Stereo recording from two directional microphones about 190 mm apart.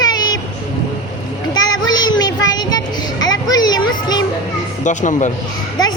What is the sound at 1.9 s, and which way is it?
Child singing, 20° left (ahead or behind).